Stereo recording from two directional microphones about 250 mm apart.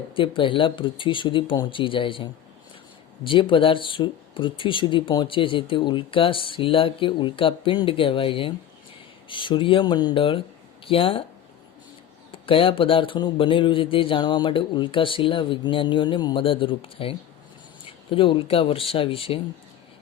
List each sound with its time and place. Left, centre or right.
0.2 s speech: centre
12.3 s speech: left